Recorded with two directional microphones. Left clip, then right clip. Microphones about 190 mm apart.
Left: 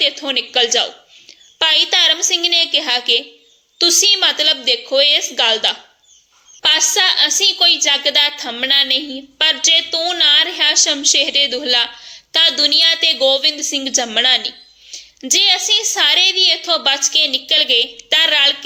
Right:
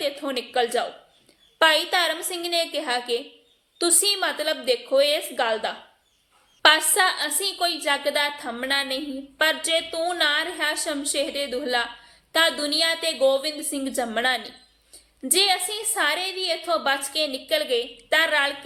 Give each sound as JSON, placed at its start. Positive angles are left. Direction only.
{"t": 0.0, "sound": "a woman's voice", "side_deg": 25}